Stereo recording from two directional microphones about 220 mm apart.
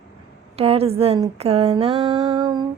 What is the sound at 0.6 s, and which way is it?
A woman's voice, 25° right (ahead or behind).